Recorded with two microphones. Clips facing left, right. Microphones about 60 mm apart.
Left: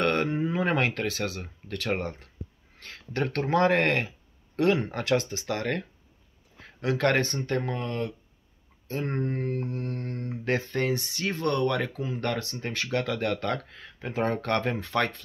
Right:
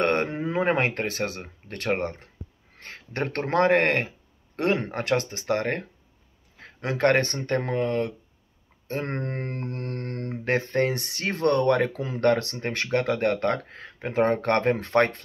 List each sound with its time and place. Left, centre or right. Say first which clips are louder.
0.0 s a sound: right 1 dB; right
0.7 s speech: right 2 dB; right
8.8 s speech: even; right
10.4 s speech: right 4 dB; right
12.0 s speech: right 7 dB; right